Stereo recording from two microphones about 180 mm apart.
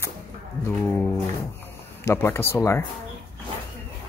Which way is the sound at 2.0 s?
15° left (ahead or behind).